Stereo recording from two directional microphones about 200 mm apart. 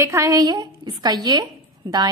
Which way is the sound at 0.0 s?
15° right (ahead or behind).